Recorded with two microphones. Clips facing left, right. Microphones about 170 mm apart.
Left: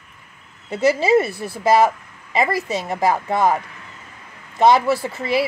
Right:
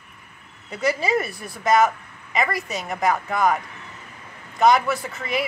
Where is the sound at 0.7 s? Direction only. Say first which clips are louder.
Left 7 dB; 25° left (ahead or behind).